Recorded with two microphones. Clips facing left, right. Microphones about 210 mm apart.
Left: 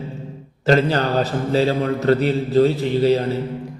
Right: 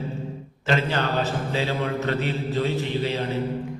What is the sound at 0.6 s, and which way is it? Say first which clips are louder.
A man's voice: left 7 dB; 40° left (ahead or behind).